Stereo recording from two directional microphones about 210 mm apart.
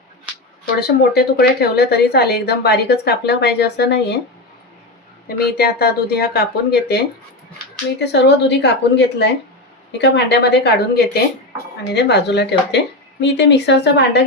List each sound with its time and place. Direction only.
0.8 s a woman's voice: 50° left (ahead or behind)
5.5 s a woman's voice: 45° left (ahead or behind)